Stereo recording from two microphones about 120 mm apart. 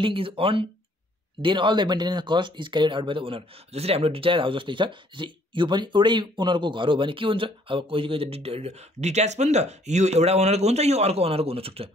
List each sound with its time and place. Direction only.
0.0 s speech: 50° right (ahead or behind)